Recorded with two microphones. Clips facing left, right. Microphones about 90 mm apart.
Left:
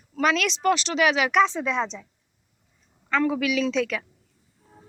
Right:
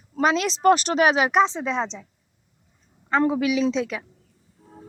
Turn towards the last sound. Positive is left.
turn(degrees=-25)  # may be behind; listen again after turning